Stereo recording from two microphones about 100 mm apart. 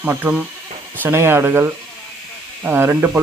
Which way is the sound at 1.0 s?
25° right (ahead or behind).